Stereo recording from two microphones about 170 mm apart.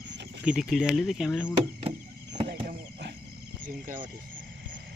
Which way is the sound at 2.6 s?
85° right.